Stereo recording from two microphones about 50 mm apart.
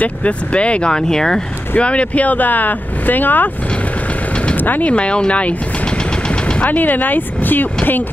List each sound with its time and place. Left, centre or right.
0.0 s speech: left
1.8 s speech: left
4.6 s speech: left
4.9 s speech: left
6.6 s speech: left